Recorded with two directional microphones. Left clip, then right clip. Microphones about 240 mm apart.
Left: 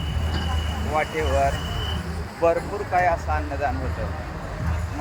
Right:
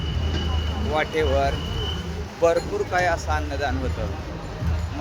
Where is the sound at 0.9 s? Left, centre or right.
Centre.